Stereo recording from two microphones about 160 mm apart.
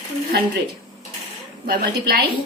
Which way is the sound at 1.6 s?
80° right.